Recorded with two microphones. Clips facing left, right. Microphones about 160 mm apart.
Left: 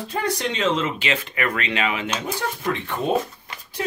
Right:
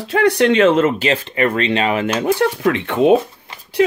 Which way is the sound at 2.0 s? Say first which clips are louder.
Right 10 dB; 60° right (ahead or behind).